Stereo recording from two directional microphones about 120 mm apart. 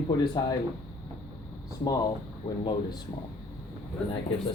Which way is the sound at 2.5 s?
50° left (ahead or behind).